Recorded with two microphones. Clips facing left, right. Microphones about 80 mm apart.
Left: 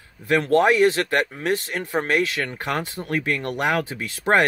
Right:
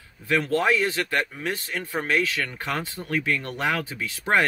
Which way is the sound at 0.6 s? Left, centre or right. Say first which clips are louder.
Left 6 dB; left.